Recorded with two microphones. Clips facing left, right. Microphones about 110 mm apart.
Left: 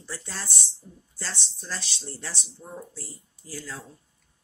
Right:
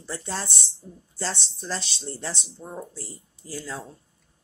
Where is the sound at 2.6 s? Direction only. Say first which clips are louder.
Right 3 dB; 40° right (ahead or behind).